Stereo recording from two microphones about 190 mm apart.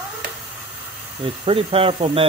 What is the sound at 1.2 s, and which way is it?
Speech, 25° right (ahead or behind).